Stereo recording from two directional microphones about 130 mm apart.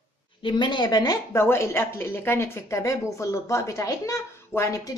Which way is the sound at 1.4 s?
20° left (ahead or behind).